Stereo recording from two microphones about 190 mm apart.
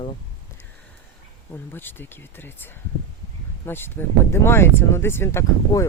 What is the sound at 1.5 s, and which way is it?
Speech, 10° left (ahead or behind).